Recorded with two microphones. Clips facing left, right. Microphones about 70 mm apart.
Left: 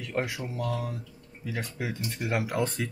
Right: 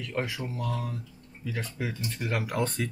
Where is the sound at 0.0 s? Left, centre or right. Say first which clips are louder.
Left 1 dB; centre.